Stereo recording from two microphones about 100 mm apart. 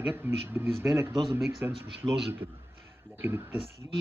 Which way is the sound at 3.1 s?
25° right (ahead or behind).